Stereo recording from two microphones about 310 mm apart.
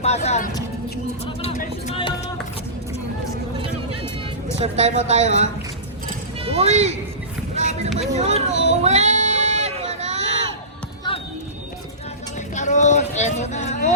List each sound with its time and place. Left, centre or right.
0.0 s music: left
4.6 s speech: right
6.1 s music: centre
7.5 s vehicle: right
7.9 s speech: right
8.8 s a sound: right
12.5 s a sound: left